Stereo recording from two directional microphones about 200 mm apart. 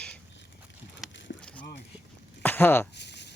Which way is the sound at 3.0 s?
60° left (ahead or behind).